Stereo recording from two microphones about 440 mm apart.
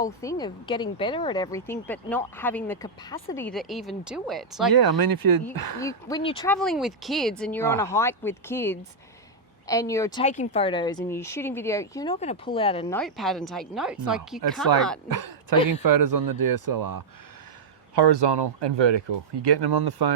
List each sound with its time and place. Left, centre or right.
0.0 s speech: centre
4.7 s speech: right
5.8 s a woman's voice: centre
13.0 s speech: centre
15.2 s speech: right
17.9 s speech: right